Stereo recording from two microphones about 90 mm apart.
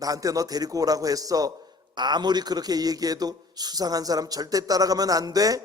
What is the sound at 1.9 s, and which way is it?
A man's voice, 55° right (ahead or behind).